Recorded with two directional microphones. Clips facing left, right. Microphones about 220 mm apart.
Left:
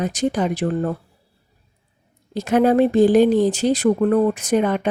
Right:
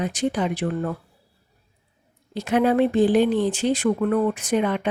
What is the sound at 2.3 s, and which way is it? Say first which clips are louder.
A woman's voice: left 4 dB; 40° left (ahead or behind).